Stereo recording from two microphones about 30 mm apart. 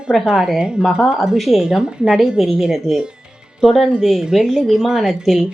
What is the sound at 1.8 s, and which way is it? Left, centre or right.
Speech, right.